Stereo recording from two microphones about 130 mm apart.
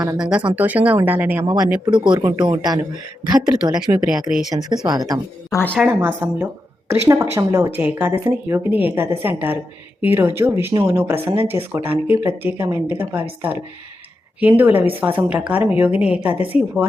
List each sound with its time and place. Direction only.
0.2 s speech: 5° right (ahead or behind)
1.8 s speech: 35° right (ahead or behind)
4.0 s speech: 5° right (ahead or behind)
4.9 s speech: 30° right (ahead or behind)
5.5 s a woman's voice: 20° left (ahead or behind)
5.8 s speech: 10° right (ahead or behind)
7.8 s speech: 10° right (ahead or behind)
14.4 s speech: 15° right (ahead or behind)